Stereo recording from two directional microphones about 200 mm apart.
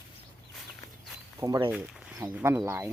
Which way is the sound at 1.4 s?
20° right (ahead or behind).